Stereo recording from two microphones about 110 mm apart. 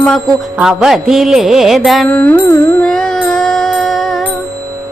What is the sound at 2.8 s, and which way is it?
Music, 5° left (ahead or behind).